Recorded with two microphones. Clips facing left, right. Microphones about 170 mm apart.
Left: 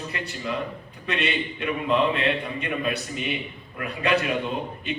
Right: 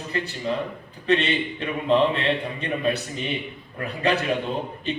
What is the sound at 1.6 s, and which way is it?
Speech, 35° right (ahead or behind).